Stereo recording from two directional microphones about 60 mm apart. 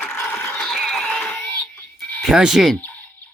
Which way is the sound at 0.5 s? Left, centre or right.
Centre.